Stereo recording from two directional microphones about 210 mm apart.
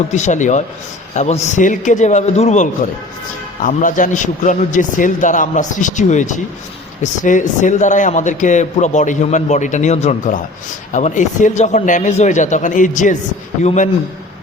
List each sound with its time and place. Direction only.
0.1 s a man's voice: 35° left (ahead or behind)